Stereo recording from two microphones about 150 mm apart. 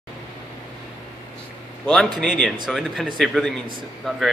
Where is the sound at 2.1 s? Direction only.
5° left (ahead or behind).